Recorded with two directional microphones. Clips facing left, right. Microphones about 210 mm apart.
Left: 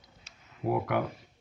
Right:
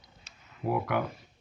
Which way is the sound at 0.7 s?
35° left (ahead or behind).